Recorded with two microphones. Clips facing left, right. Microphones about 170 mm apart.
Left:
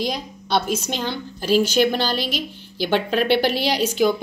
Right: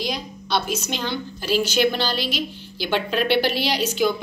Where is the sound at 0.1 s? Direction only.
50° left (ahead or behind).